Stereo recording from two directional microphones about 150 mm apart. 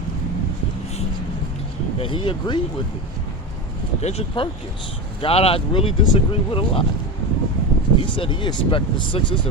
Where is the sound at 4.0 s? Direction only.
45° left (ahead or behind).